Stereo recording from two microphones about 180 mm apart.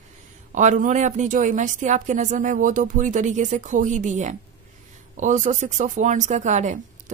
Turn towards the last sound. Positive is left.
turn(degrees=-40)  # may be behind; listen again after turning